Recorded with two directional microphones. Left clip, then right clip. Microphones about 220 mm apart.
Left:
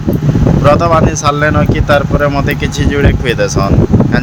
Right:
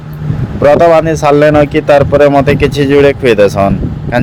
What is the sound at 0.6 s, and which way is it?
Speech, 20° right (ahead or behind).